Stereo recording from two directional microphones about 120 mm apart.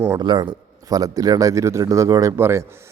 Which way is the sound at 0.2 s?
40° right (ahead or behind).